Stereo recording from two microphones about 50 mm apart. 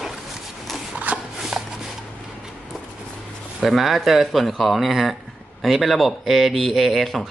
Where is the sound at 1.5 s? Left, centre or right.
Centre.